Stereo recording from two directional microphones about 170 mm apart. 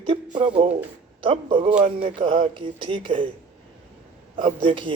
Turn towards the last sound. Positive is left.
turn(degrees=-30)  # may be behind; listen again after turning